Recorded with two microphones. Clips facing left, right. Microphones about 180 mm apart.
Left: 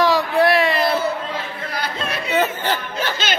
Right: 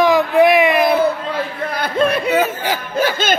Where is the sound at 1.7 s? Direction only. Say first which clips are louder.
Right 10 dB; 55° right (ahead or behind).